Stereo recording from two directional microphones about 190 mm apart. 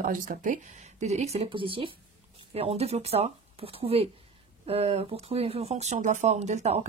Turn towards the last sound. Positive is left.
turn(degrees=-35)  # may be behind; listen again after turning